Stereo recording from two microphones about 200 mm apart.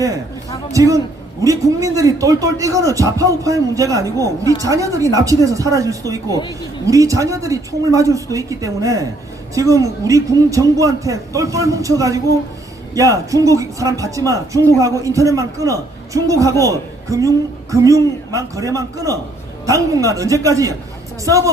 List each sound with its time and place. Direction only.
0.7 s a man's voice: 15° right (ahead or behind)